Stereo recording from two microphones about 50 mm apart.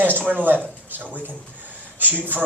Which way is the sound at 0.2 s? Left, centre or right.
Right.